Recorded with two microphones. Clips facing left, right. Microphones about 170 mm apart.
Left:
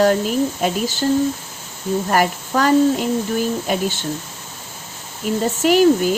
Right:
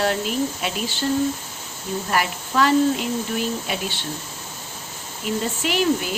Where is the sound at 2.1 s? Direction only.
45° left (ahead or behind).